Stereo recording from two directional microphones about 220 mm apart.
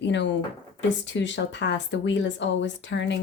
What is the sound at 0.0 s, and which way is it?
Speech, 55° left (ahead or behind).